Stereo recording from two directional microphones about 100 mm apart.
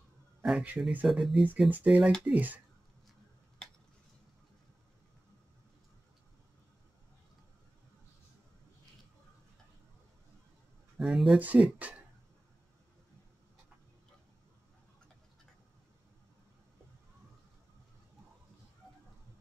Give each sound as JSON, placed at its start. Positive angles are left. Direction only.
{"t": 0.4, "sound": "speech", "side_deg": -5}
{"t": 1.7, "sound": "speech", "side_deg": -15}
{"t": 11.0, "sound": "speech", "side_deg": 0}
{"t": 11.3, "sound": "speech", "side_deg": -15}